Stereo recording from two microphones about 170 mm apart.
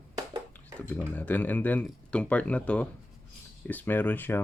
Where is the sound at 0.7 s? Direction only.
10° left (ahead or behind).